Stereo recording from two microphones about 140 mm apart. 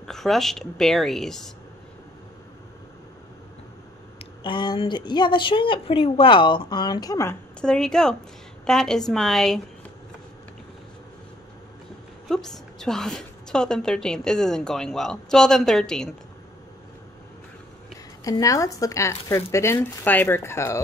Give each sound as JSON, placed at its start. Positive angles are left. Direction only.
{"t": 0.0, "sound": "a woman's voice", "side_deg": 0}
{"t": 4.2, "sound": "a woman's voice", "side_deg": 35}
{"t": 7.6, "sound": "a woman's voice", "side_deg": 5}
{"t": 12.3, "sound": "a woman's voice", "side_deg": 5}
{"t": 18.2, "sound": "speech", "side_deg": 25}